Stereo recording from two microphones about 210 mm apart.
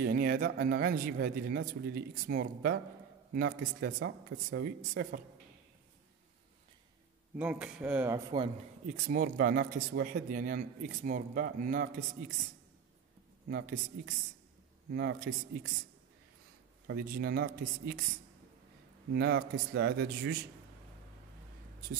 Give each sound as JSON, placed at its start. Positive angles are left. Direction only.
{"t": 0.0, "sound": "speech", "side_deg": -45}
{"t": 7.3, "sound": "speech", "side_deg": -5}
{"t": 8.3, "sound": "speech", "side_deg": -30}
{"t": 14.9, "sound": "speech", "side_deg": -50}
{"t": 16.8, "sound": "speech", "side_deg": -45}
{"t": 19.1, "sound": "speech", "side_deg": -50}